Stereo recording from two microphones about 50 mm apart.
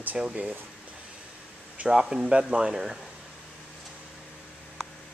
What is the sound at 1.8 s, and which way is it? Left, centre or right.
Speech, centre.